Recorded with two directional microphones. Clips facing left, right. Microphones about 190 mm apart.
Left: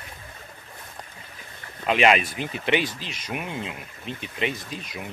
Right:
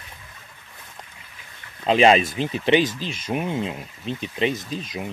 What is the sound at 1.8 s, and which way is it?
Speech, 30° right (ahead or behind).